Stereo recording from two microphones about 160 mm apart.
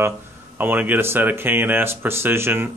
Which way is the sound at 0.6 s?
10° right (ahead or behind).